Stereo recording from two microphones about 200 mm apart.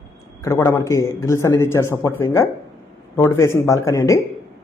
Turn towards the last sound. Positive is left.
turn(degrees=15)  # may be behind; listen again after turning